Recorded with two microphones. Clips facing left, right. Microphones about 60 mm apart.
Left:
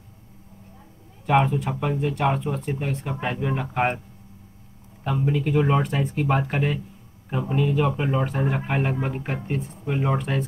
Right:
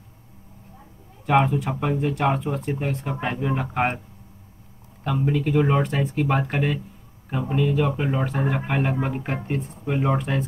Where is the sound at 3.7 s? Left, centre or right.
Centre.